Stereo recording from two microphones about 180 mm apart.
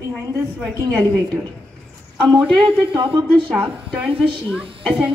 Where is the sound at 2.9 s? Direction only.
30° right (ahead or behind).